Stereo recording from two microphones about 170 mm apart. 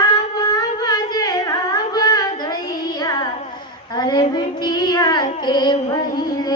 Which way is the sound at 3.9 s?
25° left (ahead or behind).